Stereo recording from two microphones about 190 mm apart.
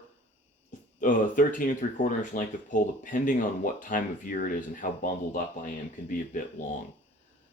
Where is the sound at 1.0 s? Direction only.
45° left (ahead or behind).